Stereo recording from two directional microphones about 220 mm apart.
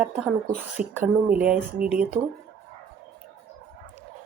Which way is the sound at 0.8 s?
40° right (ahead or behind).